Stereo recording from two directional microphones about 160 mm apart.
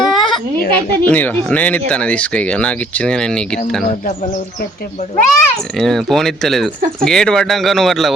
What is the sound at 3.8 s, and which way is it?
Speech, 55° left (ahead or behind).